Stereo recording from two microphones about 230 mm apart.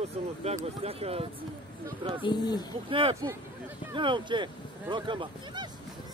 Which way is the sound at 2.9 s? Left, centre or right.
Right.